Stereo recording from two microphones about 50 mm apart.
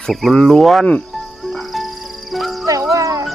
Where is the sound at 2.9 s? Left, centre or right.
Right.